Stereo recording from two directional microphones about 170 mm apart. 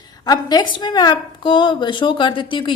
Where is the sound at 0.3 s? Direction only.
25° left (ahead or behind).